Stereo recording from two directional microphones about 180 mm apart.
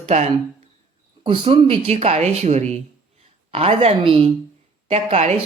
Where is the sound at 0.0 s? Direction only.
40° right (ahead or behind).